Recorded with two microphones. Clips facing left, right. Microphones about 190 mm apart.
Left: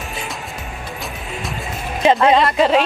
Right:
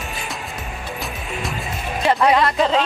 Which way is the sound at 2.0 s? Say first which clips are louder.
Left 3 dB; 20° left (ahead or behind).